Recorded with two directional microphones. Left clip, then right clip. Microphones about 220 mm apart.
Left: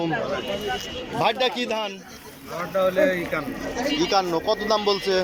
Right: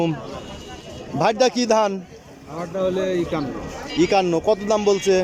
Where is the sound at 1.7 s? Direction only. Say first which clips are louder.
Right 9 dB; 25° right (ahead or behind).